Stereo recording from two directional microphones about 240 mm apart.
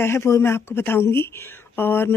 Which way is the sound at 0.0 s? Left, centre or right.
Centre.